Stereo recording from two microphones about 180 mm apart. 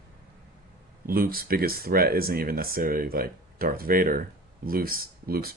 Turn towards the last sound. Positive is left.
turn(degrees=-55)  # may be behind; listen again after turning